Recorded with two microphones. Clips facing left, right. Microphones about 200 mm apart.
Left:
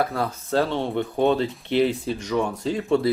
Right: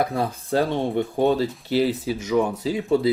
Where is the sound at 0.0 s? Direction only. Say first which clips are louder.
Right 1 dB; 15° right (ahead or behind).